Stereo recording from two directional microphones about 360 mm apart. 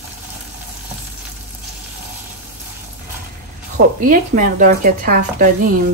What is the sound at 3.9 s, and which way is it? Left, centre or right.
A woman's voice, right.